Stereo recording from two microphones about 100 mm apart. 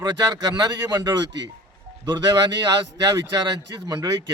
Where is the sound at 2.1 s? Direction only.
45° right (ahead or behind).